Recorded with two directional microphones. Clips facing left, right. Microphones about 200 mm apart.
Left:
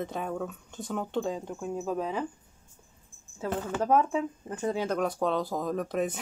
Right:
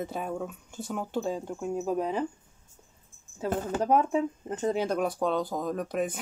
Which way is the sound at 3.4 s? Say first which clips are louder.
Right 2 dB; 40° right (ahead or behind).